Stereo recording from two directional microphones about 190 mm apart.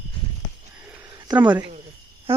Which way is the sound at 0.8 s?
5° right (ahead or behind).